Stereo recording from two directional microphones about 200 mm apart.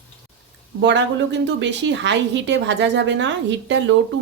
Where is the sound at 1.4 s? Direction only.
65° right (ahead or behind).